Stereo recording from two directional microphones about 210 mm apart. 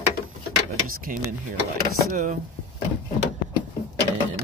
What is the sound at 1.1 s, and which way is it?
Speech, 40° right (ahead or behind).